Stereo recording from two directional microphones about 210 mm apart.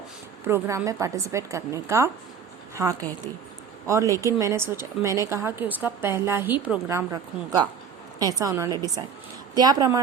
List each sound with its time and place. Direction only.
0.4 s a woman's voice: 10° right (ahead or behind)